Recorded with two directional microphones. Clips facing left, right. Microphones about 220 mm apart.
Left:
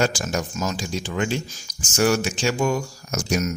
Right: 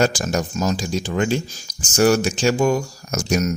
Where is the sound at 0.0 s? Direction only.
40° right (ahead or behind).